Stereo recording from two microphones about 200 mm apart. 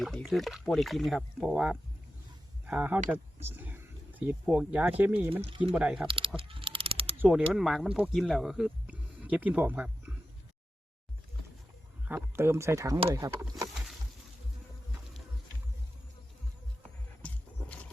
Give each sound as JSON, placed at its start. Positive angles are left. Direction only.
{"t": 0.0, "sound": "speech", "side_deg": 0}
{"t": 5.3, "sound": "speech", "side_deg": -25}
{"t": 5.7, "sound": "speech", "side_deg": -5}
{"t": 6.1, "sound": "a sound", "side_deg": -25}
{"t": 7.2, "sound": "speech", "side_deg": -5}
{"t": 12.0, "sound": "speech", "side_deg": -10}
{"t": 17.2, "sound": "wild animals", "side_deg": 5}